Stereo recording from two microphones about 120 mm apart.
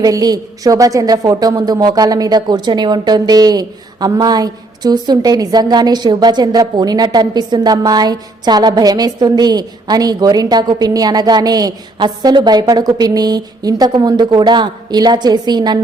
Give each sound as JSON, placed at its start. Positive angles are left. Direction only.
{"t": 0.0, "sound": "a woman's voice", "side_deg": -30}